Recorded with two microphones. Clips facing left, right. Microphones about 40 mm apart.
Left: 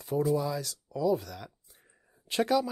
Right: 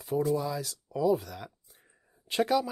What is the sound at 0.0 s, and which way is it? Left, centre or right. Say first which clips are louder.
Speech: even; centre.